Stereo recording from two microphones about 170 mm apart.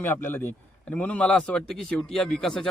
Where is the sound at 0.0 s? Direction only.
10° left (ahead or behind).